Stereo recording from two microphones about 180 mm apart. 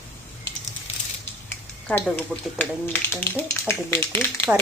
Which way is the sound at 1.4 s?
10° left (ahead or behind).